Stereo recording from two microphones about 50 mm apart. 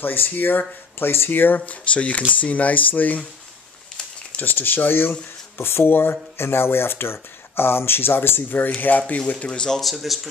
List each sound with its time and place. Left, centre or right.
0.0 s speech: left
1.7 s speech: left
4.4 s speech: left
5.6 s speech: left
9.6 s speech: centre